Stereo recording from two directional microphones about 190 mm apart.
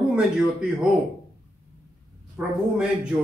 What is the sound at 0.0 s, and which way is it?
Speech, 5° right (ahead or behind).